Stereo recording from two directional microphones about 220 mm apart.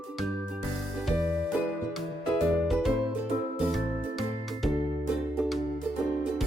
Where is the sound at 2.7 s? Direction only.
Centre (ahead or behind).